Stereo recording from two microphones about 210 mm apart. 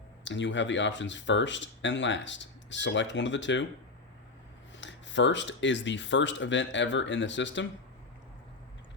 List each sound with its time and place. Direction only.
0.3 s speech: 60° left (ahead or behind)
4.8 s speech: 60° left (ahead or behind)